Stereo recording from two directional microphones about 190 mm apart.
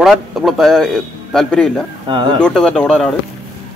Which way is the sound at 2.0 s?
25° right (ahead or behind).